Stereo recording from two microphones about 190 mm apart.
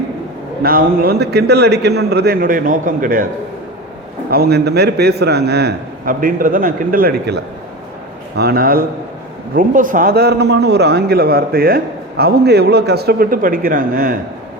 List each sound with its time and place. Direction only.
0.6 s a man's voice: 55° right (ahead or behind)
4.3 s a man's voice: 55° right (ahead or behind)